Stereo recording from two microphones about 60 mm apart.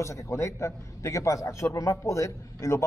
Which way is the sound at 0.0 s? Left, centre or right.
Left.